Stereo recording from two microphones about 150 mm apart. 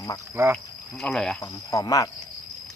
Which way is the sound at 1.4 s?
20° left (ahead or behind).